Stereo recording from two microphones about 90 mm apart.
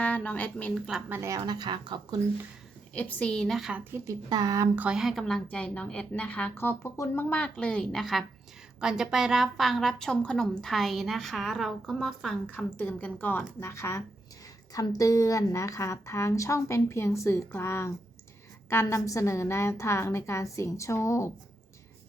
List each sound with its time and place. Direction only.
0.0 s a woman's voice: 15° left (ahead or behind)
0.7 s a woman's voice: 5° right (ahead or behind)
1.1 s speech: 30° right (ahead or behind)
1.4 s speech: 50° right (ahead or behind)
2.9 s a woman's voice: 15° left (ahead or behind)
3.9 s speech: 35° right (ahead or behind)
4.7 s speech: 20° right (ahead or behind)
4.9 s a woman's voice: centre (ahead or behind)
5.5 s a woman's voice: 15° left (ahead or behind)
6.5 s speech: 25° left (ahead or behind)
7.3 s a woman's voice: 15° left (ahead or behind)
12.5 s a woman's voice: 15° left (ahead or behind); by 21.2 s 35° left (ahead or behind)